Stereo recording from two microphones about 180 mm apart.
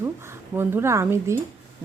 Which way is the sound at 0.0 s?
15° right (ahead or behind).